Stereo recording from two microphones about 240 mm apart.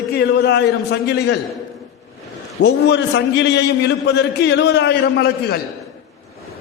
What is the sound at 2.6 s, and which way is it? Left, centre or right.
A man's voice, left.